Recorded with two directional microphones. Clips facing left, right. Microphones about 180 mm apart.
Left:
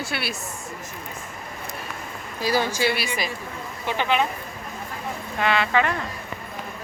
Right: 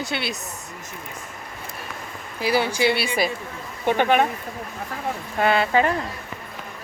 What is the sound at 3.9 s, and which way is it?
Speech, 50° right (ahead or behind).